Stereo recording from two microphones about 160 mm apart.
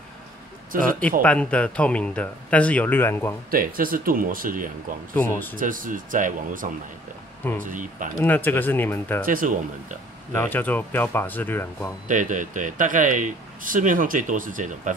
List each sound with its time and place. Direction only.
0.7 s speech: 60° right (ahead or behind)
1.2 s speech: 5° left (ahead or behind)
3.4 s speech: 65° right (ahead or behind)
5.1 s speech: 10° left (ahead or behind)
5.6 s speech: 55° right (ahead or behind)
8.2 s speech: 10° left (ahead or behind)
9.2 s speech: 60° right (ahead or behind)
10.3 s speech: 10° left (ahead or behind)
12.1 s speech: 55° right (ahead or behind)